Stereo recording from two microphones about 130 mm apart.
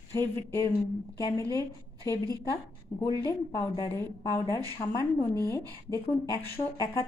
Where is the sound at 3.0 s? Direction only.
25° left (ahead or behind).